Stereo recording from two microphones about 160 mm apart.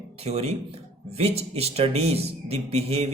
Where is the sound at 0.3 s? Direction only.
40° right (ahead or behind).